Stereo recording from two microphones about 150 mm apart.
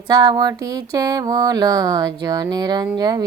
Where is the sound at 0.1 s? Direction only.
25° right (ahead or behind).